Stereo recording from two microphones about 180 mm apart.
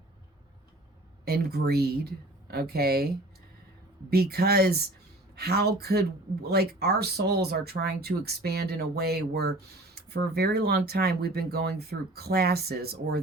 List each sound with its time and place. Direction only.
1.2 s speech: 60° right (ahead or behind)